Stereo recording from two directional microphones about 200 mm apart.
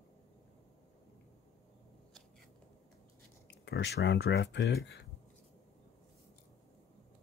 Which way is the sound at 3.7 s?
60° left (ahead or behind).